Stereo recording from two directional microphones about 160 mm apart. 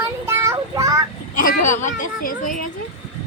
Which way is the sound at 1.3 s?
55° left (ahead or behind).